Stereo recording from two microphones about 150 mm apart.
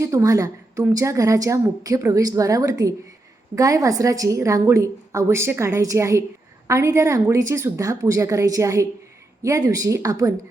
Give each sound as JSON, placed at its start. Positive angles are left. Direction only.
{"t": 0.0, "sound": "a woman's voice", "side_deg": -20}